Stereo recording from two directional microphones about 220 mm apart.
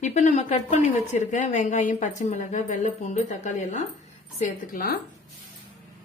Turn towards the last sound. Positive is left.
turn(degrees=40)  # may be behind; listen again after turning